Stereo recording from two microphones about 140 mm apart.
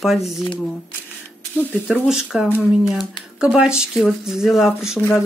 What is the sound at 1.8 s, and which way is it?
Speech, 10° right (ahead or behind).